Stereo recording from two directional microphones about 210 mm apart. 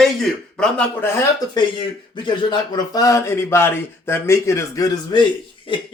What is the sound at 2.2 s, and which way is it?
Speech, 20° left (ahead or behind).